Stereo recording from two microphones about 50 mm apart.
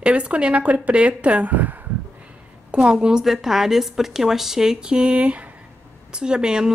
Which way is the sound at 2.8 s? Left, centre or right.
Centre.